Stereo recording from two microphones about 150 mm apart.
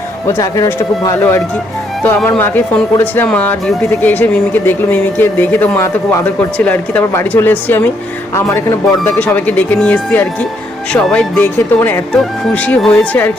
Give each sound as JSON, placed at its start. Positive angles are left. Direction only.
{"t": 0.3, "sound": "speech", "side_deg": 25}
{"t": 2.4, "sound": "speech", "side_deg": 15}